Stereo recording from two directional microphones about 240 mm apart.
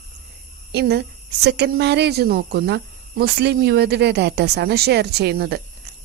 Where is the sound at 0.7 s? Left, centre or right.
Right.